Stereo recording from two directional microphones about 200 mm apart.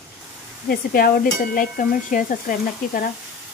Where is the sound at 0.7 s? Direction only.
45° left (ahead or behind).